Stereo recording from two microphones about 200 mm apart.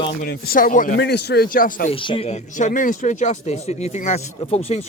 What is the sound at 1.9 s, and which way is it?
Speech, 25° left (ahead or behind).